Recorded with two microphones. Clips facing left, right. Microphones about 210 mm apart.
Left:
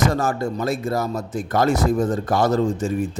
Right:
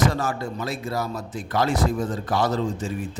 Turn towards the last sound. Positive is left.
turn(degrees=45)  # may be behind; listen again after turning